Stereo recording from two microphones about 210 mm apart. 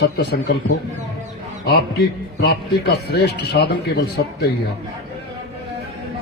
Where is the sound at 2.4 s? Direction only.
50° left (ahead or behind).